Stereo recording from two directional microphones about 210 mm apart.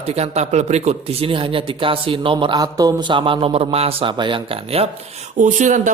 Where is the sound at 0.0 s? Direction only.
30° right (ahead or behind).